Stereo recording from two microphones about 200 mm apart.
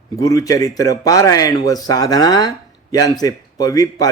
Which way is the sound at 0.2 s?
15° left (ahead or behind).